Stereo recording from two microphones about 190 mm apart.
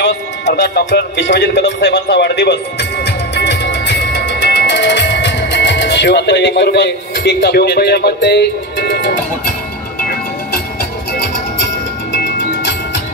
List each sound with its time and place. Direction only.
0.0 s music: 65° left (ahead or behind)
9.9 s music: 50° left (ahead or behind)
12.4 s music: 70° left (ahead or behind)